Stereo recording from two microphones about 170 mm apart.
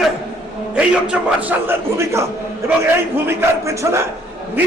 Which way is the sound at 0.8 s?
10° right (ahead or behind).